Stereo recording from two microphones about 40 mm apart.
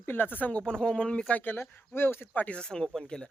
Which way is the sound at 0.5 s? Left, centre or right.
Centre.